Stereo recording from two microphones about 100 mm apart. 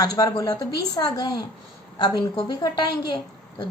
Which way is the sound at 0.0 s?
35° left (ahead or behind).